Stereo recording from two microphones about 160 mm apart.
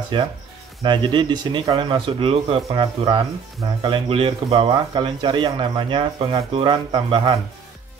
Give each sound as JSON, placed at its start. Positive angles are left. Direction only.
{"t": 0.1, "sound": "speech", "side_deg": -30}